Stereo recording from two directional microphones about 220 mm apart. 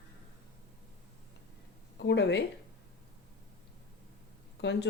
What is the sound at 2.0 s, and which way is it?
Speech, 50° left (ahead or behind).